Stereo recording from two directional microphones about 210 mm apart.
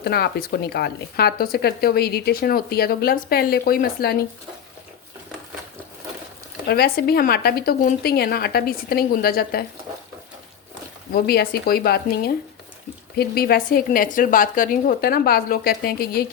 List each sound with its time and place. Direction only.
0.0 s speech: 50° left (ahead or behind)
6.7 s speech: 45° left (ahead or behind)
11.1 s speech: 45° left (ahead or behind)